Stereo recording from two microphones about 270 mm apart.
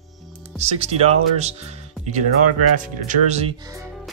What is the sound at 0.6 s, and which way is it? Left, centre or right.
Speech, right.